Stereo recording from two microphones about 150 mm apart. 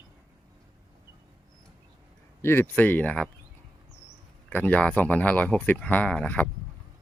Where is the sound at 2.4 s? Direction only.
15° left (ahead or behind).